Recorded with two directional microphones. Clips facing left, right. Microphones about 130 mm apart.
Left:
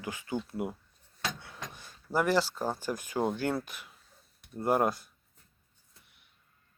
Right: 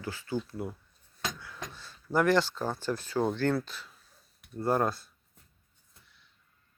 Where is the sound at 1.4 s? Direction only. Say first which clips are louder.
Right 1 dB; 20° left (ahead or behind).